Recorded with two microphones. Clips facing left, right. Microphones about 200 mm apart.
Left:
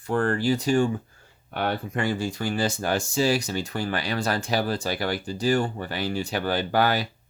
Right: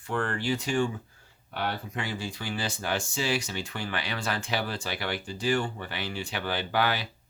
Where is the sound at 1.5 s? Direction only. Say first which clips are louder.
Left 5 dB; 50° left (ahead or behind).